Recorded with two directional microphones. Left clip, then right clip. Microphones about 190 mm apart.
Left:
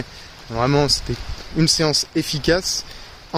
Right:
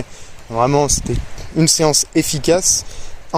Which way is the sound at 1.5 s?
20° right (ahead or behind).